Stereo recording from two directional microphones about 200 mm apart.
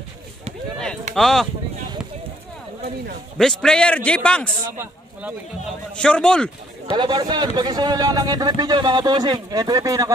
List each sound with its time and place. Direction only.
1.1 s a man's voice: centre (ahead or behind)
3.3 s a man's voice: 5° left (ahead or behind)
4.6 s speech: 10° right (ahead or behind)
5.9 s a man's voice: 5° left (ahead or behind)
6.9 s speech: 20° right (ahead or behind)